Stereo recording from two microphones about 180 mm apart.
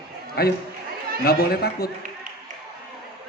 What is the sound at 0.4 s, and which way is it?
A man's voice, 60° left (ahead or behind).